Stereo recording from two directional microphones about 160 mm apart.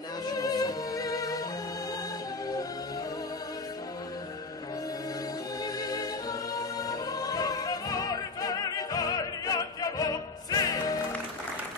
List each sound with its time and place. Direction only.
0.3 s music: 25° left (ahead or behind)
5.6 s choir: 25° left (ahead or behind)